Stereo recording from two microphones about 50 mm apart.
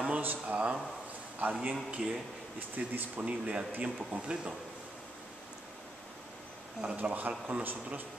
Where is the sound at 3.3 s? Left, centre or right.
Right.